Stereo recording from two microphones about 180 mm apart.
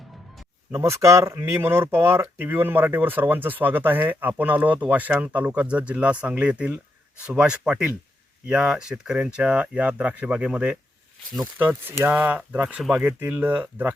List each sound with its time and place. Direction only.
0.7 s speech: 15° right (ahead or behind)